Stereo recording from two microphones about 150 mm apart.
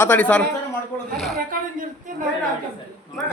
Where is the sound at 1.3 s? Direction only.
70° right (ahead or behind).